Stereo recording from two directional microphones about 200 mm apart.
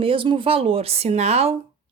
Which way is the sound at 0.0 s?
25° right (ahead or behind).